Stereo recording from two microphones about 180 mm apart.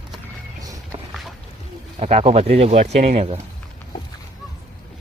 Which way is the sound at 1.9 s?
35° right (ahead or behind).